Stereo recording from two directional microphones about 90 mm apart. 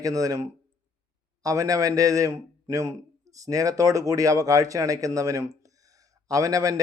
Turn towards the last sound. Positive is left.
turn(degrees=-40)  # may be behind; listen again after turning